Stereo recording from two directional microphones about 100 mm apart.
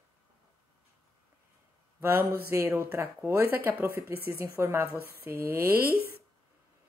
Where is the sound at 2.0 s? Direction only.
20° right (ahead or behind).